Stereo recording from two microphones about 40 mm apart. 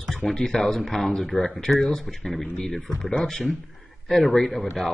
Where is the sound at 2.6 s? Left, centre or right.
Left.